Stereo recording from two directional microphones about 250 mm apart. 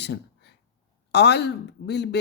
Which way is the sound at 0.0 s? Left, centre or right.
Left.